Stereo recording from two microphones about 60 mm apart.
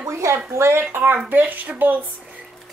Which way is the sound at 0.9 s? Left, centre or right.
Right.